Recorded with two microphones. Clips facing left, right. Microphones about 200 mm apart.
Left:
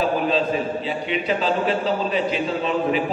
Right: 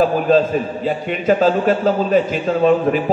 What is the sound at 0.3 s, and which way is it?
A man's voice, 45° right (ahead or behind).